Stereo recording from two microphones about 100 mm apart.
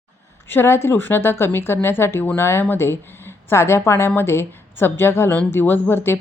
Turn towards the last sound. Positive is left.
turn(degrees=20)  # may be behind; listen again after turning